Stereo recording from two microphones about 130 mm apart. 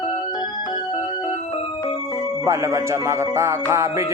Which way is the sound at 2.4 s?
25° right (ahead or behind).